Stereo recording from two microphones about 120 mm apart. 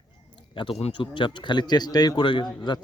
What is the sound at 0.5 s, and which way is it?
Speech, 45° left (ahead or behind).